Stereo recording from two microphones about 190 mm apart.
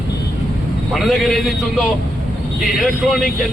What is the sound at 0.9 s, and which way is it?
Speech, centre (ahead or behind).